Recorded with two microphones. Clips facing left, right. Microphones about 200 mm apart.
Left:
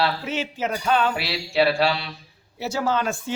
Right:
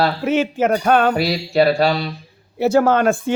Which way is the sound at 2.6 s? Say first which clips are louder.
Right 10 dB; 55° right (ahead or behind).